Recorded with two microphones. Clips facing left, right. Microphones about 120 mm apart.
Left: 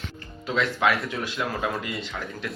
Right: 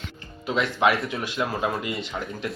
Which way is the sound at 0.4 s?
20° right (ahead or behind).